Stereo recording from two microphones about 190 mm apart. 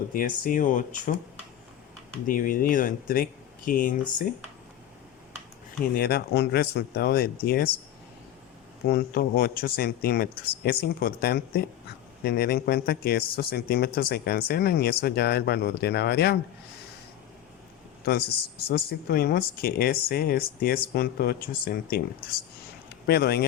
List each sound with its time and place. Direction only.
0.1 s speech: 45° left (ahead or behind)
2.2 s speech: 45° left (ahead or behind)
5.8 s speech: 50° left (ahead or behind)
8.9 s speech: 55° left (ahead or behind)
18.7 s speech: 55° left (ahead or behind)